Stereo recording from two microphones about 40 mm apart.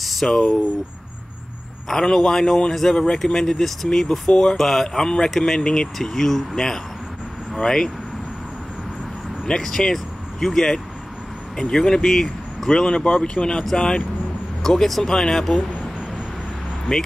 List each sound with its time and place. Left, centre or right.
0.0 s a sound: centre
1.9 s speech: centre
9.5 s speech: centre
14.6 s speech: centre
16.9 s speech: centre